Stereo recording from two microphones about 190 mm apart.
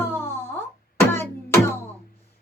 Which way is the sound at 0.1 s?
10° left (ahead or behind).